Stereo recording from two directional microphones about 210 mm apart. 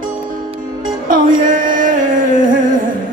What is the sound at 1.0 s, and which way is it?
Music, 40° right (ahead or behind).